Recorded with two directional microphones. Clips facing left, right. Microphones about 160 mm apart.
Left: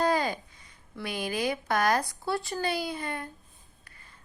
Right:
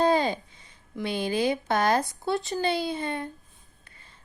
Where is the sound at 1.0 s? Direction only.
25° right (ahead or behind).